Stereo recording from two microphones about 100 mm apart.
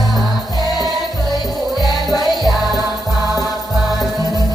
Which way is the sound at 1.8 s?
40° left (ahead or behind).